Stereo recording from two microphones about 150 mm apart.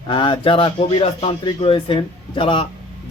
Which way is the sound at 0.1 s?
35° left (ahead or behind).